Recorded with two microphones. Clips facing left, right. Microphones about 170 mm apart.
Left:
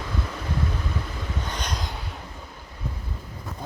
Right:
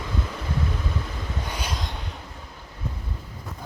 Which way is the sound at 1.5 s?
5° right (ahead or behind).